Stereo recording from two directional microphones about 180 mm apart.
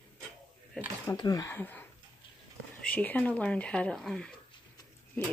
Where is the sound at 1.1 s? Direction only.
20° left (ahead or behind).